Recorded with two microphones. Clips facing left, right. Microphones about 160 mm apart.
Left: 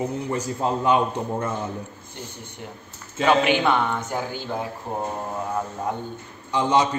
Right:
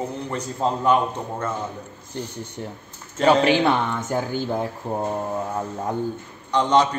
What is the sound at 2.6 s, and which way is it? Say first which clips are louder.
A man's voice: right 4 dB; 35° right (ahead or behind).